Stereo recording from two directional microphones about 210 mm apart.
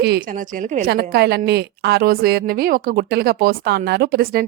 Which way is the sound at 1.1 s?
50° right (ahead or behind).